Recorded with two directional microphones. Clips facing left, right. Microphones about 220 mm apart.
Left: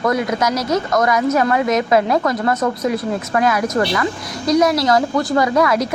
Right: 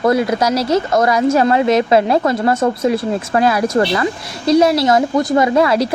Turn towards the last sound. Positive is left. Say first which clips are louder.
# right 3 dB
turn(degrees=-30)  # may be behind; listen again after turning